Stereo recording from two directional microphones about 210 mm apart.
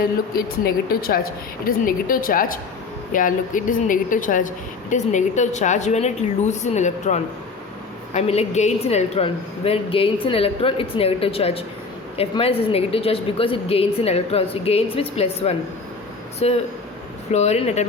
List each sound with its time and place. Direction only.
0.0 s a woman's voice: 45° left (ahead or behind)